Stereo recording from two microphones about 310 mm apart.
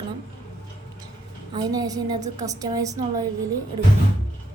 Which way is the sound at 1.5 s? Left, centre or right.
Centre.